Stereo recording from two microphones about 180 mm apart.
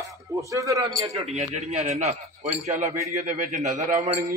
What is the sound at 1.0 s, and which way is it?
A man's voice, 35° right (ahead or behind).